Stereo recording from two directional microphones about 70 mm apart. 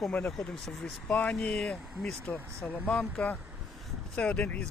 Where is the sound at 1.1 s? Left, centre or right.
Left.